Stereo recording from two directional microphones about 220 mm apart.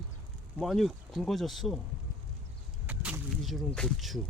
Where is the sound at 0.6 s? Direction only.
Centre (ahead or behind).